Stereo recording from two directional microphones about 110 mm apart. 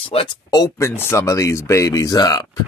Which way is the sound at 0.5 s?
35° left (ahead or behind).